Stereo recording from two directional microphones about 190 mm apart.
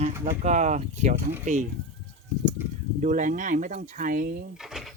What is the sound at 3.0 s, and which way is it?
Speech, 45° right (ahead or behind).